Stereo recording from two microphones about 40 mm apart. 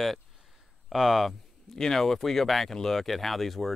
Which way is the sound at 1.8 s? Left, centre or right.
Centre.